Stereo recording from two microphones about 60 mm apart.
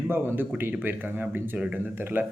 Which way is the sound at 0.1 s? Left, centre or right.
Right.